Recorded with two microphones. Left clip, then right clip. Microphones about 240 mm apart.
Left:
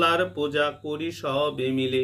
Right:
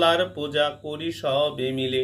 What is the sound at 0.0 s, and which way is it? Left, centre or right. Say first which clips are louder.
Speech: right 1 dB; centre.